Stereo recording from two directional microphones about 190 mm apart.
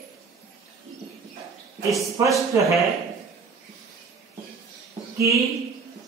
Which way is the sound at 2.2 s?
15° right (ahead or behind).